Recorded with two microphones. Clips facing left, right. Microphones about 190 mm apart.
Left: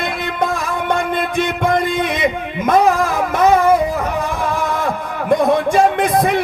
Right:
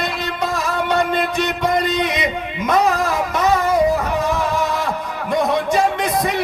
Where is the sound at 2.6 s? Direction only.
55° left (ahead or behind).